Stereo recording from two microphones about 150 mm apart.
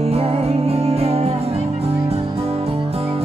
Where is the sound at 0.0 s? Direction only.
40° right (ahead or behind).